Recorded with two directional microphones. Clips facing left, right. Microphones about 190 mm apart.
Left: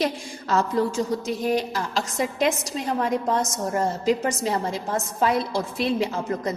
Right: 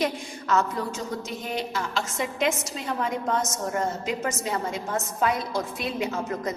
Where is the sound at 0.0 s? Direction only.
30° left (ahead or behind).